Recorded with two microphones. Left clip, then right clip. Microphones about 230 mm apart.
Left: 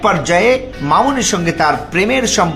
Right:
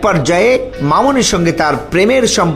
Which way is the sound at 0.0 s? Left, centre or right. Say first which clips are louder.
Right 1 dB; right.